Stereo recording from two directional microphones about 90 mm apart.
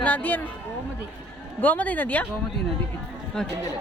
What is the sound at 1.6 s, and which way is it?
Speech, 15° left (ahead or behind).